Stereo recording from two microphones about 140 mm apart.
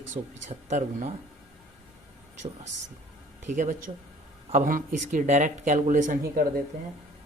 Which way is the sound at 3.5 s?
60° right (ahead or behind).